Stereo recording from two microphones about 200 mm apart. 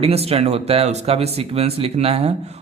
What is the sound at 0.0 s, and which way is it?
A man's voice, 30° right (ahead or behind).